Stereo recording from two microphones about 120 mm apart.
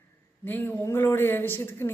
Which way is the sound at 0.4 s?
15° left (ahead or behind).